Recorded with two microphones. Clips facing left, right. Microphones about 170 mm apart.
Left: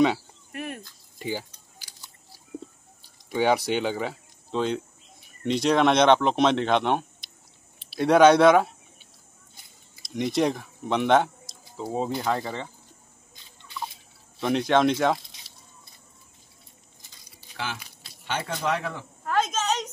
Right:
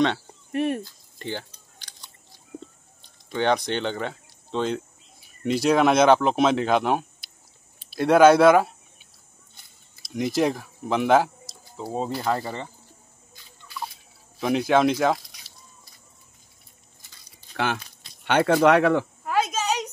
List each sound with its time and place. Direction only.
0.5 s speech: 30° right (ahead or behind)
1.2 s biting: 10° left (ahead or behind)
3.0 s speech: 10° left (ahead or behind)
10.0 s speech: centre (ahead or behind)
14.4 s speech: 5° right (ahead or behind)
17.1 s a sound: 15° left (ahead or behind)
18.2 s speech: 65° right (ahead or behind)
19.2 s a sound: 10° right (ahead or behind)